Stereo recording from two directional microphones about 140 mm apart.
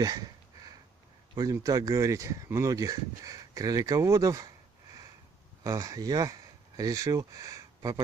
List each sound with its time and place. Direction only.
0.0 s a sound: 30° right (ahead or behind)
1.3 s speech: 25° right (ahead or behind)
5.6 s speech: 25° right (ahead or behind)